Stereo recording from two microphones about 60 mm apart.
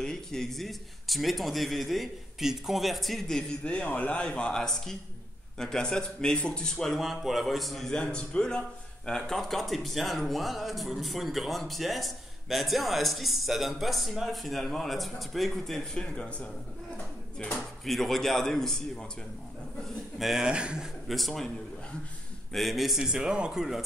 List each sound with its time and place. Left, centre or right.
0.0 s speech: centre
3.6 s speech: left
17.8 s speech: centre
20.2 s speech: centre
20.5 s speech: centre
21.1 s speech: centre
22.5 s speech: centre